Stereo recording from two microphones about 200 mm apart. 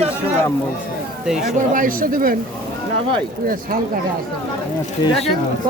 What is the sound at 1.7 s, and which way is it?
Speech, 45° right (ahead or behind).